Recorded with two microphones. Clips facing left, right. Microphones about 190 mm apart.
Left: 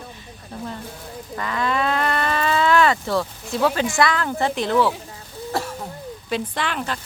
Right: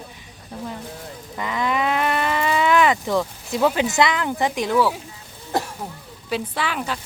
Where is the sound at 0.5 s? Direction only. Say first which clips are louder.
Even; 10° right (ahead or behind).